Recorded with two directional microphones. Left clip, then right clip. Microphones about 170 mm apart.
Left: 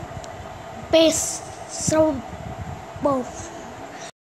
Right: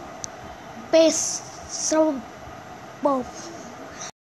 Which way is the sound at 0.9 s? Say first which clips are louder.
Left 1 dB; 10° left (ahead or behind).